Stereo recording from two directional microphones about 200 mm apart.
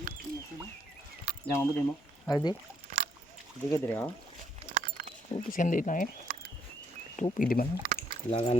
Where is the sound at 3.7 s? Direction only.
10° left (ahead or behind).